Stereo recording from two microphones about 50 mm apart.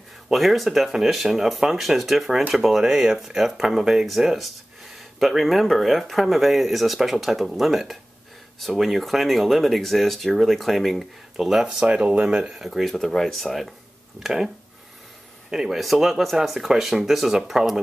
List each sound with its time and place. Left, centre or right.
0.3 s speech: centre
11.3 s speech: centre
12.5 s speech: centre
15.5 s speech: centre